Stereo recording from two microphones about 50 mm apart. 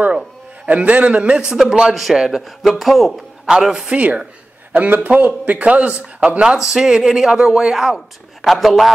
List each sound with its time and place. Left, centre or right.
0.7 s speech: right
1.4 s music: centre
2.6 s a man's voice: centre
3.4 s music: centre
3.9 s speech: right
4.7 s speech: right; by 6.6 s centre
6.6 s music: centre
8.4 s a man's voice: centre